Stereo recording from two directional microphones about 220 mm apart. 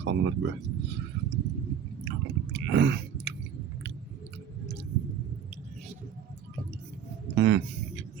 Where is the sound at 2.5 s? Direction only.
50° right (ahead or behind).